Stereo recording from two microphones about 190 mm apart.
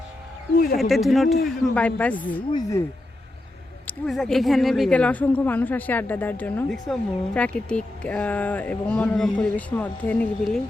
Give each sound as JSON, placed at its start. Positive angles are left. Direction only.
{"t": 0.8, "sound": "speech", "side_deg": 0}
{"t": 2.5, "sound": "speech", "side_deg": 20}
{"t": 3.8, "sound": "speech", "side_deg": 0}